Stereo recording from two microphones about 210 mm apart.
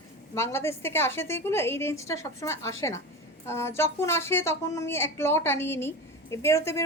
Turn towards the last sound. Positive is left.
turn(degrees=15)  # may be behind; listen again after turning